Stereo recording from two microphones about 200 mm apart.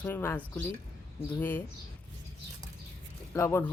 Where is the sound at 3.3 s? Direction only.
15° left (ahead or behind).